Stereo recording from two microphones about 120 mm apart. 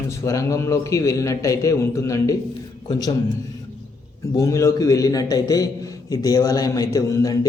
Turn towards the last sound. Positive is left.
turn(degrees=30)  # may be behind; listen again after turning